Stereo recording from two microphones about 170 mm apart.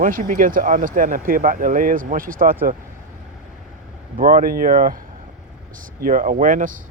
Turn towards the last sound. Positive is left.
turn(degrees=-50)  # may be behind; listen again after turning